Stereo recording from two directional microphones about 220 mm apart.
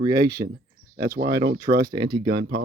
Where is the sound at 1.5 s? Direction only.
40° right (ahead or behind).